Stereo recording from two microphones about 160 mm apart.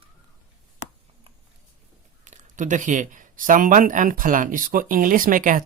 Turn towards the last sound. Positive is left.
turn(degrees=-55)  # may be behind; listen again after turning